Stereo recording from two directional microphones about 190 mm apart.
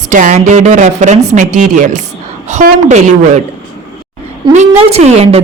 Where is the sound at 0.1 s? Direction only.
45° right (ahead or behind).